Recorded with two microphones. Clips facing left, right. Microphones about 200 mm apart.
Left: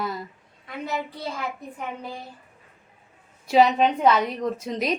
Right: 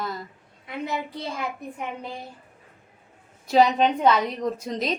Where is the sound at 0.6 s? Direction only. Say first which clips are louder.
Right 1 dB; 15° right (ahead or behind).